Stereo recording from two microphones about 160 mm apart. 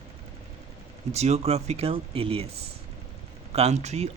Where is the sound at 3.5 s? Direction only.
40° right (ahead or behind).